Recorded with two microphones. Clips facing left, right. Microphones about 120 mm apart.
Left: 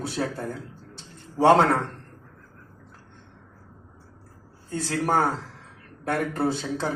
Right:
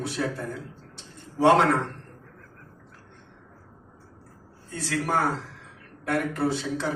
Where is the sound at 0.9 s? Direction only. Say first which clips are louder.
Left 2 dB; 30° left (ahead or behind).